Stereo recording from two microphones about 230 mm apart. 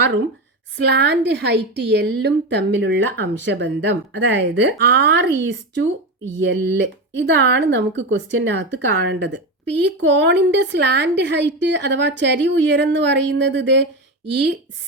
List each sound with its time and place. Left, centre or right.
0.8 s a woman's voice: right